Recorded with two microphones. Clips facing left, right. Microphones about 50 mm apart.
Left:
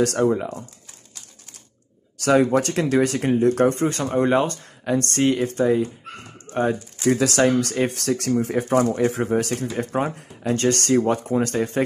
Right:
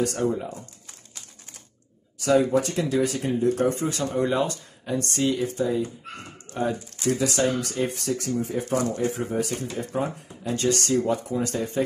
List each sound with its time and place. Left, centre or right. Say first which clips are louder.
0.0 s speech: left 5 dB; left
2.1 s speech: left 3 dB; left
4.8 s speech: left 5 dB; left
6.5 s speech: left 5 dB; left
7.1 s speech: left 5 dB; left